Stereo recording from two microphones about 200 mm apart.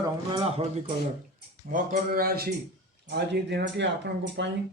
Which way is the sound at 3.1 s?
55° right (ahead or behind).